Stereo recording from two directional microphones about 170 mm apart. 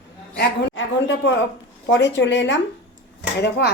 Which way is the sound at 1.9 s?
90° left.